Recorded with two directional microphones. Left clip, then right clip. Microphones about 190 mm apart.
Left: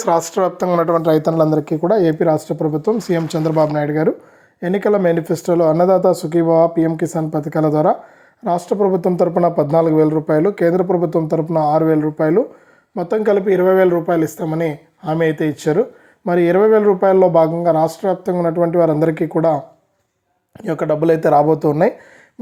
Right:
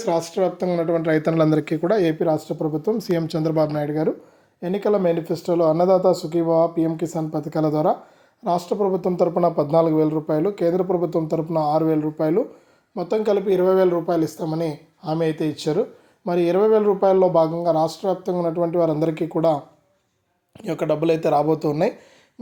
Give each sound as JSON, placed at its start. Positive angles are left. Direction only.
{"t": 0.0, "sound": "speech", "side_deg": 0}
{"t": 1.9, "sound": "speech", "side_deg": 25}
{"t": 2.8, "sound": "speech", "side_deg": 5}